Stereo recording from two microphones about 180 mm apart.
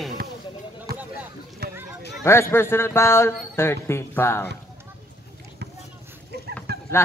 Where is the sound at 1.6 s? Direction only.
60° right (ahead or behind).